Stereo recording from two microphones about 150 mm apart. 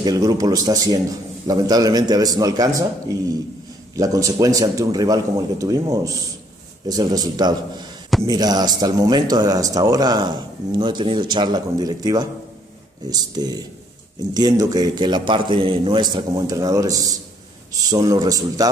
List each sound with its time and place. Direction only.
0.0 s speech: 25° right (ahead or behind)
3.9 s speech: 25° right (ahead or behind)